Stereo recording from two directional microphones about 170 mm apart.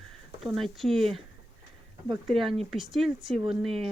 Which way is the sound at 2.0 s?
Centre (ahead or behind).